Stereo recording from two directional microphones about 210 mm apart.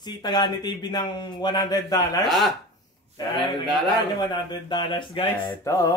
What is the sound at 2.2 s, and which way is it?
Speech, centre (ahead or behind).